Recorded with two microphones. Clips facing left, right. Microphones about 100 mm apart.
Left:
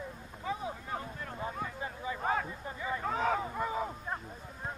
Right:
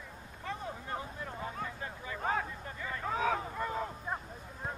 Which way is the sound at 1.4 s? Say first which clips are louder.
Left 3 dB; 15° left (ahead or behind).